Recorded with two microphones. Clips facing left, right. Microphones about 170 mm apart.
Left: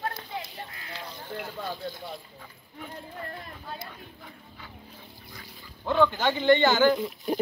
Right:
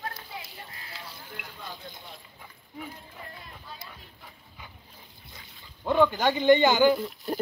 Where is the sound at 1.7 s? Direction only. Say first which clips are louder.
Left 8 dB; 20° right (ahead or behind).